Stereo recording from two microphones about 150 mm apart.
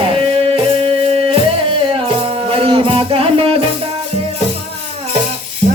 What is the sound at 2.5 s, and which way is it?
Music, 40° right (ahead or behind).